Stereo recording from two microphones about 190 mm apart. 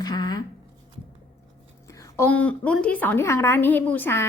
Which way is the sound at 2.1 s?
10° left (ahead or behind).